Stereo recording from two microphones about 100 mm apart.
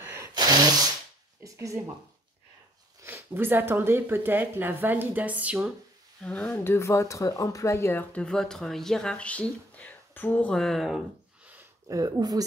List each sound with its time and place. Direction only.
0.0 s sneeze: 25° right (ahead or behind)
0.3 s sneeze: 45° right (ahead or behind)
1.4 s a sound: 35° right (ahead or behind)
3.0 s speech: 25° right (ahead or behind)
6.2 s speech: 10° left (ahead or behind)
6.5 s speech: 25° left (ahead or behind); by 11.1 s centre (ahead or behind)
11.9 s speech: 40° right (ahead or behind)